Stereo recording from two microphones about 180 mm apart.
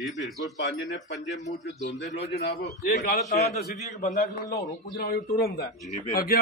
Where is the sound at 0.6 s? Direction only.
80° left; by 2.9 s 65° left (ahead or behind).